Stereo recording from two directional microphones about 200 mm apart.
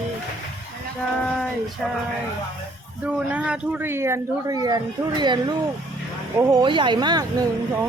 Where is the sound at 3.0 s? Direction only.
5° right (ahead or behind).